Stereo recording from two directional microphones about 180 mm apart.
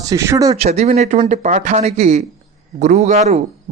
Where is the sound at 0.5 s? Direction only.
35° right (ahead or behind).